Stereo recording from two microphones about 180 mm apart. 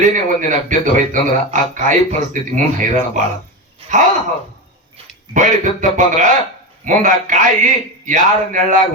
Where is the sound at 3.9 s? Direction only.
45° right (ahead or behind).